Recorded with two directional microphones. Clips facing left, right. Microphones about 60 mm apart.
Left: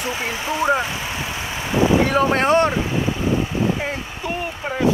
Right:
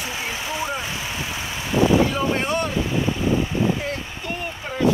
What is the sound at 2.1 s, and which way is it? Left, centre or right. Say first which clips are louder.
Speech: left 6 dB; left.